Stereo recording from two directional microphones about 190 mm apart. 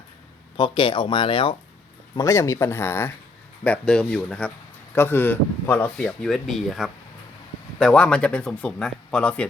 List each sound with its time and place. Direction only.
0.5 s speech: 25° left (ahead or behind)
2.1 s speech: 15° left (ahead or behind)